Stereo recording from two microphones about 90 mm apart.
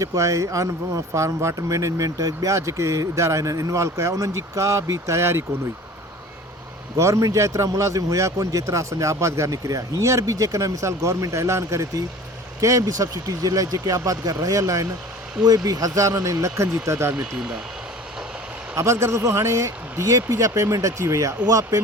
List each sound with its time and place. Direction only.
0.0 s speech: 35° right (ahead or behind)
6.9 s speech: 35° right (ahead or behind)
17.2 s speech: 10° right (ahead or behind)
18.8 s speech: 35° right (ahead or behind)